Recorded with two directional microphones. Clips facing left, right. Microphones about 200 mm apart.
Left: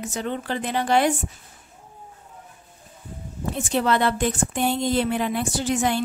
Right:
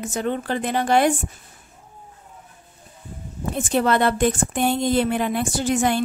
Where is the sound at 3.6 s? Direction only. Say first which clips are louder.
Right 2 dB; 50° right (ahead or behind).